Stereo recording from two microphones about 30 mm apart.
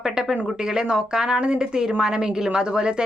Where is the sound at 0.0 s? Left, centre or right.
Right.